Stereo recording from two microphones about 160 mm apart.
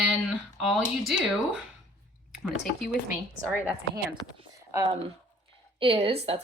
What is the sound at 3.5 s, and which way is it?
Speech, 10° right (ahead or behind).